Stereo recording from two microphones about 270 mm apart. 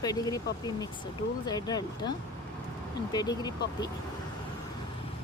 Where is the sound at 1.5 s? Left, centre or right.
Centre.